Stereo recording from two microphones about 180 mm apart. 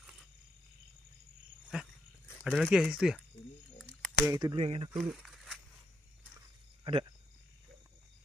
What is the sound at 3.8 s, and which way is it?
Typing, 5° left (ahead or behind).